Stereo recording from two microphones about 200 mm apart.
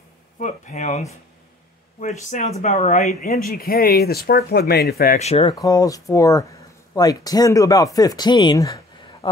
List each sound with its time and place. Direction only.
0.4 s speech: 35° left (ahead or behind)
3.3 s speech: 50° left (ahead or behind)
5.2 s speech: 30° left (ahead or behind)
5.5 s speech: 20° left (ahead or behind)